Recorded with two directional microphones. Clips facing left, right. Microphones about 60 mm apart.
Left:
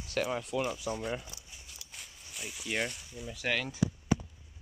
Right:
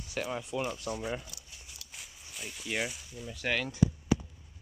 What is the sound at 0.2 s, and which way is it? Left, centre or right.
Speech, centre.